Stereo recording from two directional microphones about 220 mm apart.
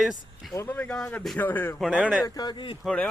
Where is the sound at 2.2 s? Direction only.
20° left (ahead or behind).